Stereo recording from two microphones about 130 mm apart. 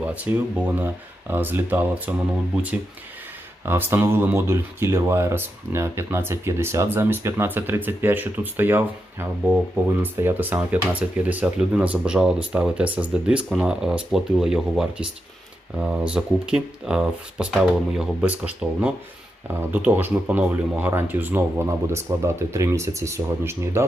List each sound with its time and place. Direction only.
0.0 s speech: 10° right (ahead or behind)
3.7 s speech: 15° right (ahead or behind)